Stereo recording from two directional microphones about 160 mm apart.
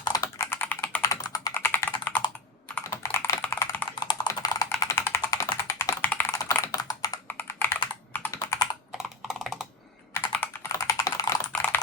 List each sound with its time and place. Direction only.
0.0 s computer keyboard: 20° left (ahead or behind)
1.0 s computer keyboard: 25° left (ahead or behind)
1.5 s computer keyboard: 15° left (ahead or behind)
4.0 s computer keyboard: 25° left (ahead or behind)
9.0 s computer keyboard: centre (ahead or behind)
10.3 s computer keyboard: 15° left (ahead or behind)